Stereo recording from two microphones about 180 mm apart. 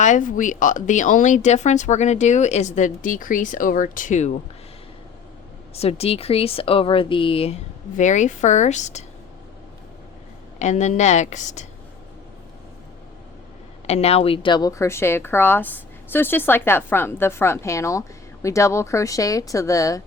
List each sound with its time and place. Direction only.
0.0 s speech: 45° left (ahead or behind)
5.7 s speech: 35° left (ahead or behind)
10.6 s speech: 40° left (ahead or behind)
13.8 s a woman's voice: 35° left (ahead or behind); by 20.0 s 20° left (ahead or behind)